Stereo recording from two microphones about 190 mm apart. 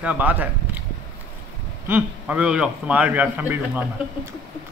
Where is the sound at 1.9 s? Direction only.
10° right (ahead or behind).